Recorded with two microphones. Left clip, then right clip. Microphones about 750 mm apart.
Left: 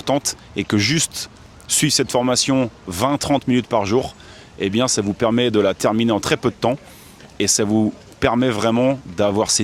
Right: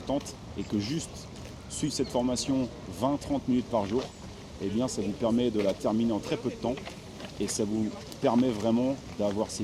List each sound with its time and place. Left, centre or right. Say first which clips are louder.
0.1 s speech: left 12 dB; left